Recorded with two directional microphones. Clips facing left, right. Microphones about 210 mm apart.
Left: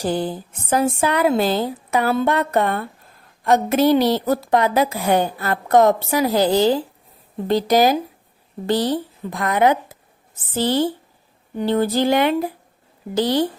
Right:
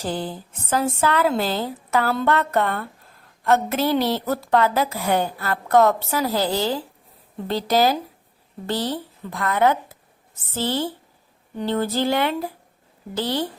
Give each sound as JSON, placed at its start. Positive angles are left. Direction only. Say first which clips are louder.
{"t": 0.0, "sound": "a woman's voice", "louder": "left 5 dB", "side_deg": 15}